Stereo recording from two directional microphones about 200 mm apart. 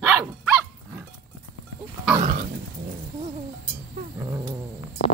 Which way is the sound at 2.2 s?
40° right (ahead or behind).